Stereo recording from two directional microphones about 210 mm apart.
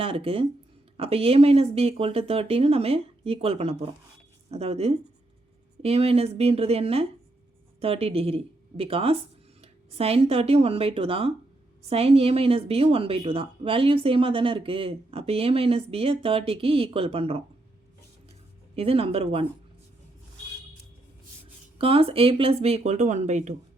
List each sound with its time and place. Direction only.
0.0 s a woman's voice: 25° right (ahead or behind)
18.8 s a woman's voice: 25° right (ahead or behind)
21.8 s a woman's voice: 25° right (ahead or behind)